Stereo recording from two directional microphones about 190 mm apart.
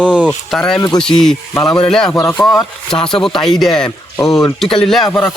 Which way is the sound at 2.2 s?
15° left (ahead or behind).